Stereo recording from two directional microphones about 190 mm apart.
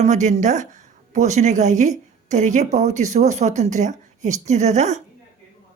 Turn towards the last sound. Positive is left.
turn(degrees=-40)  # may be behind; listen again after turning